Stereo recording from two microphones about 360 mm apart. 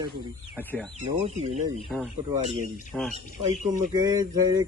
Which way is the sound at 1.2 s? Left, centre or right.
Centre.